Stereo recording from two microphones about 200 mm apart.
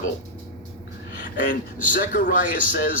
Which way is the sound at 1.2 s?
40° left (ahead or behind).